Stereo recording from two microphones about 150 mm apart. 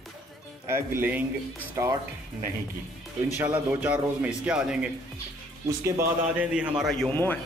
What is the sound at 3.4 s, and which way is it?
A man's voice, 10° right (ahead or behind).